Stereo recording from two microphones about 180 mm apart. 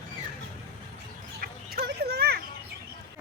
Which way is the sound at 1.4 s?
60° right (ahead or behind).